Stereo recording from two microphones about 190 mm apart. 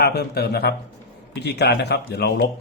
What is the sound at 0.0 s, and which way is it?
Speech, 60° left (ahead or behind).